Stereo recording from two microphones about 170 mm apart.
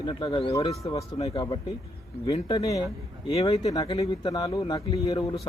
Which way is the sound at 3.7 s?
20° left (ahead or behind).